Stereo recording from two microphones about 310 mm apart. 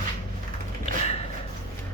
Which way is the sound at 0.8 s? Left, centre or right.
Centre.